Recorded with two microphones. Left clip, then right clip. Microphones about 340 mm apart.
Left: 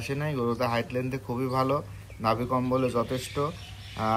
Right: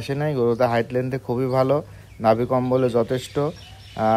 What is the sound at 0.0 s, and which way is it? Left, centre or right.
Speech, right.